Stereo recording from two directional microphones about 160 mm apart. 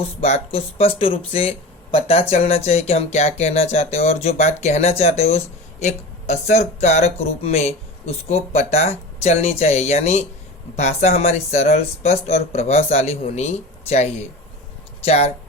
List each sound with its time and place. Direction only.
0.2 s speech: 40° left (ahead or behind)